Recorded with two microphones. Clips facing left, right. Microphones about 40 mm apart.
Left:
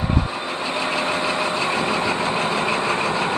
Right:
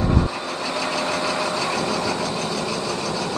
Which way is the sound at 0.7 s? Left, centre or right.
Left.